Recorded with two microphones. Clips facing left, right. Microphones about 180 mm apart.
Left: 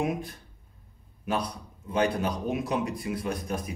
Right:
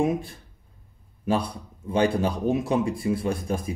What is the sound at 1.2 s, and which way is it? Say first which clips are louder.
Speech: right 5 dB; 30° right (ahead or behind).